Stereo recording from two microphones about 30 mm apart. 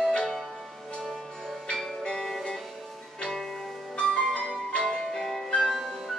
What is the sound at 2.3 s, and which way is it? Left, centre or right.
Music, left.